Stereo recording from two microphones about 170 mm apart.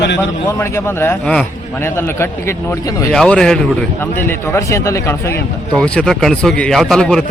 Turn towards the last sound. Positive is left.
turn(degrees=5)  # may be behind; listen again after turning